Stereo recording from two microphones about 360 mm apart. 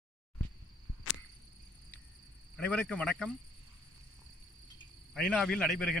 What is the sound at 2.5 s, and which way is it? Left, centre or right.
Speech, centre.